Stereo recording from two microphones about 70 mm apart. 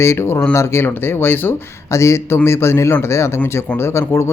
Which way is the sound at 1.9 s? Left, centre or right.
Left.